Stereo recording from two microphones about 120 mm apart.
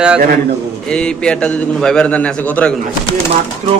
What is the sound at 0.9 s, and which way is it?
A man's voice, 5° left (ahead or behind).